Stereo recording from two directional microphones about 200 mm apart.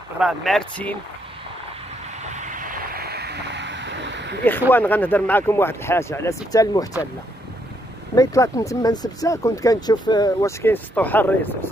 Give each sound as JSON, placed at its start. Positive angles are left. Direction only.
{"t": 0.2, "sound": "speech", "side_deg": 0}
{"t": 2.3, "sound": "vehicle", "side_deg": -40}
{"t": 4.5, "sound": "speech", "side_deg": 10}
{"t": 8.1, "sound": "speech", "side_deg": 15}